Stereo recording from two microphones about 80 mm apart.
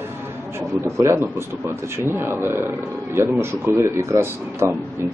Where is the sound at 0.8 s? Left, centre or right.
Right.